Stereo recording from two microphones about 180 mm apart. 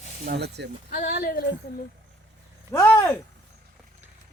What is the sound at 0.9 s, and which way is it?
Speech, 55° left (ahead or behind).